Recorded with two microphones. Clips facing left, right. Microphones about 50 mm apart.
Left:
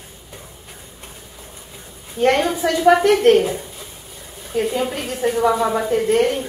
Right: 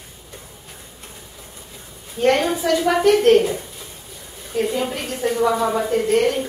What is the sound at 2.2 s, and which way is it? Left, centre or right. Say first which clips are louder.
A woman's voice: left 1 dB; centre.